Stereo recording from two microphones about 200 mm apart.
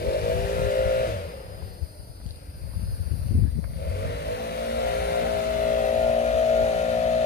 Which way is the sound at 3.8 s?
55° left (ahead or behind).